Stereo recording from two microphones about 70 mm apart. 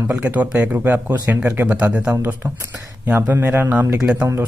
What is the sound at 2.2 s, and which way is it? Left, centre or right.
Speech, right.